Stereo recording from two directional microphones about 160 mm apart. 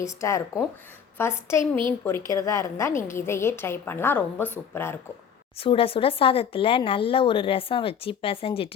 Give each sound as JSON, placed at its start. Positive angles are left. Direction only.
{"t": 0.0, "sound": "a woman's voice", "side_deg": 20}
{"t": 5.5, "sound": "speech", "side_deg": 35}